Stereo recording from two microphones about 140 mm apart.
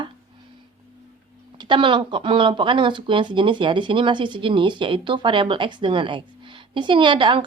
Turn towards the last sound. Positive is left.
turn(degrees=-35)  # may be behind; listen again after turning